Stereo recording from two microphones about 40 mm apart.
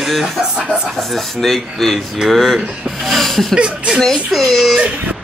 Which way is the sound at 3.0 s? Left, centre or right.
Centre.